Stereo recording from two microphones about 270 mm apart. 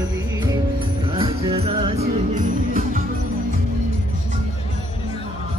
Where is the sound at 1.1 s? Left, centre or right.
Right.